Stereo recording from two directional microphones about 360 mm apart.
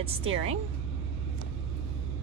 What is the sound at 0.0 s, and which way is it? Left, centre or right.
Speech, centre.